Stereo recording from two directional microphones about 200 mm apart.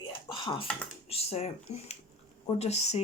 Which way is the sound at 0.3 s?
25° left (ahead or behind).